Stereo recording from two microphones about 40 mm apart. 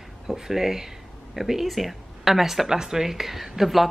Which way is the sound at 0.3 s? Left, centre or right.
Centre.